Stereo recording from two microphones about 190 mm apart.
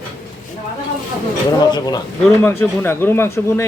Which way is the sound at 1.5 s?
20° left (ahead or behind).